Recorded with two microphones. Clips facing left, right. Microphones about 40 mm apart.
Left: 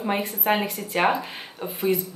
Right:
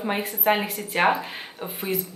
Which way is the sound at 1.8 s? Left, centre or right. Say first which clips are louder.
Left 5 dB; centre.